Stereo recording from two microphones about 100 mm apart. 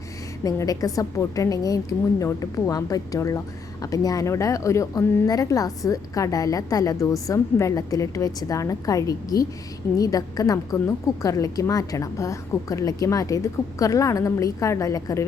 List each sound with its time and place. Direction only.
0.4 s a woman's voice: 35° left (ahead or behind)